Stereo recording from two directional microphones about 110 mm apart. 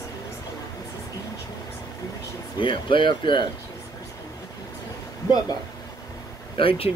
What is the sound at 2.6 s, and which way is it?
Speech, 50° left (ahead or behind).